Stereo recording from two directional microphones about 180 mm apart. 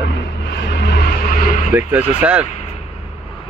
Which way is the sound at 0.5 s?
70° left (ahead or behind).